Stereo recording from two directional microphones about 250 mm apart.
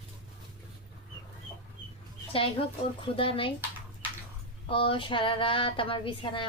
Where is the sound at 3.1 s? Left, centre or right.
Left.